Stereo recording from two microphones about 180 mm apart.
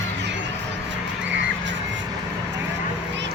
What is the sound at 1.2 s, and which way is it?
Crow, 90° right.